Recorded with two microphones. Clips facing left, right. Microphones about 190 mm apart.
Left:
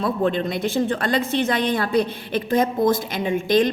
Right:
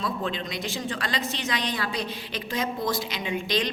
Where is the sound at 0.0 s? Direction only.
55° left (ahead or behind).